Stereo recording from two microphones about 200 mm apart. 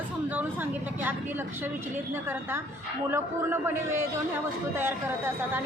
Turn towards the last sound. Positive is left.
turn(degrees=-10)  # may be behind; listen again after turning